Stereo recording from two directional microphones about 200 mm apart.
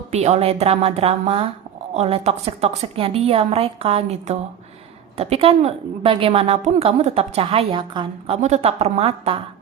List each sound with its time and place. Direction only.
0.1 s a woman's voice: 35° right (ahead or behind)
8.4 s a woman's voice: 35° right (ahead or behind)